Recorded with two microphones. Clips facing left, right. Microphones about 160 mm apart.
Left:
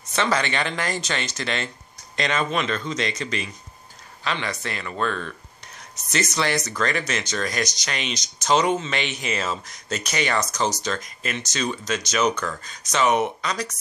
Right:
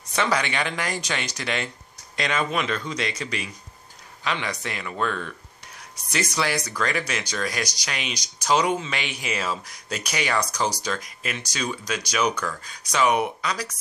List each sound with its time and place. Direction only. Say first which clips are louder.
0.1 s speech: left 1 dB; 10° right (ahead or behind)